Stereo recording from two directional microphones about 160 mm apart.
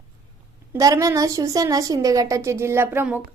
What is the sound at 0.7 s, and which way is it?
A woman's voice, 20° right (ahead or behind).